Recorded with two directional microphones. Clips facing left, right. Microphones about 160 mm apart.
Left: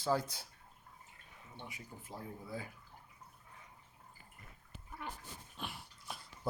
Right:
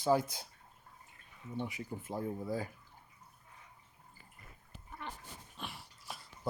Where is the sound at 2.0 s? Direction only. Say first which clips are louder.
Right 9 dB; 45° right (ahead or behind).